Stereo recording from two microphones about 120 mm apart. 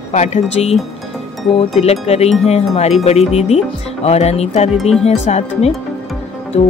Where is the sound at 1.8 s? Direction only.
60° left (ahead or behind).